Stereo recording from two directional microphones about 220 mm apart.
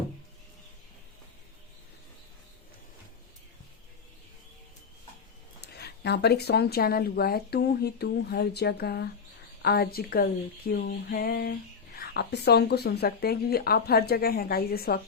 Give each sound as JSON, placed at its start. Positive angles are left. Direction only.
{"t": 5.5, "sound": "a woman's voice", "side_deg": 50}